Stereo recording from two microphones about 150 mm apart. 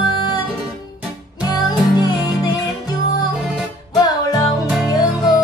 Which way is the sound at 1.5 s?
25° left (ahead or behind).